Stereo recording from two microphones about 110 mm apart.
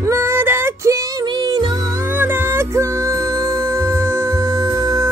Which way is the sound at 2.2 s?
20° right (ahead or behind).